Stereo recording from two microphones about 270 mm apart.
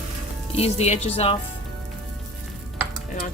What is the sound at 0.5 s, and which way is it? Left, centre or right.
Speech, left.